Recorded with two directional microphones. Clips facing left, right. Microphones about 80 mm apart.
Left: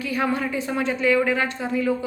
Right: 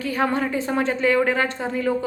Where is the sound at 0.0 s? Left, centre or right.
Right.